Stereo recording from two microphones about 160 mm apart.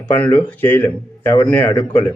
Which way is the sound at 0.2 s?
10° left (ahead or behind).